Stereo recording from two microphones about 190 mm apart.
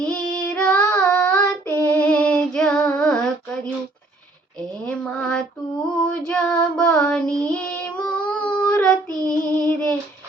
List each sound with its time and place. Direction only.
0.0 s child singing: 5° left (ahead or behind)
4.9 s a sound: 5° left (ahead or behind)
6.2 s female singing: 5° left (ahead or behind)
9.0 s child singing: 20° right (ahead or behind)
9.6 s child singing: 5° left (ahead or behind)